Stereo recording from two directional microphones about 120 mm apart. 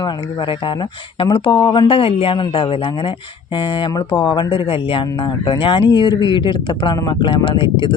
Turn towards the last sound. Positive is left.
turn(degrees=40)  # may be behind; listen again after turning